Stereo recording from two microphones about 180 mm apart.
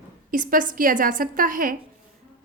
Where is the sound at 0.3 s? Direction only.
50° right (ahead or behind).